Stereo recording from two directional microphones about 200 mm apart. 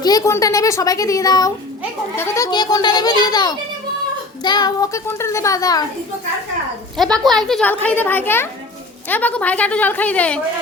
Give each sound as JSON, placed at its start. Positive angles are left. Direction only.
{"t": 0.0, "sound": "a child's voice", "side_deg": 20}
{"t": 6.9, "sound": "a child's voice", "side_deg": 0}